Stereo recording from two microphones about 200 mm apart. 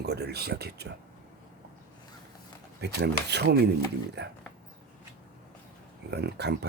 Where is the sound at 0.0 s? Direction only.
55° right (ahead or behind).